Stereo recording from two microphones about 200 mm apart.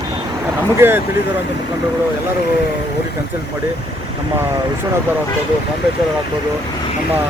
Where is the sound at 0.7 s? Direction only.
10° right (ahead or behind).